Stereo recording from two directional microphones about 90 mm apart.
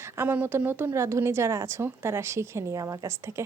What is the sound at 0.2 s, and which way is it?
A woman's voice, 25° right (ahead or behind).